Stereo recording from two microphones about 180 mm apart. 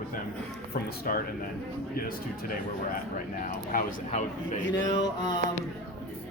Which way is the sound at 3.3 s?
50° left (ahead or behind).